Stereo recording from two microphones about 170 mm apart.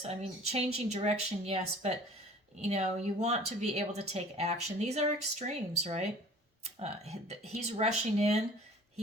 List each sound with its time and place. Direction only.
0.1 s a woman's voice: 40° right (ahead or behind)